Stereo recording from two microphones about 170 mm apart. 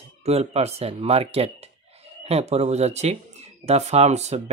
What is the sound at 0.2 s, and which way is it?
Speech, 40° right (ahead or behind).